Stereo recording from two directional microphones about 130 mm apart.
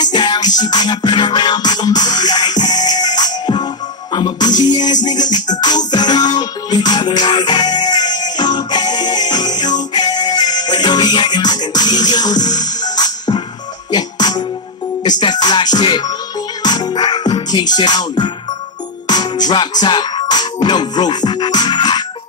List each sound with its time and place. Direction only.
0.0 s music: 35° left (ahead or behind)